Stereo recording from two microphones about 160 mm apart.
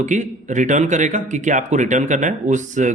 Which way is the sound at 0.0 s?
50° right (ahead or behind).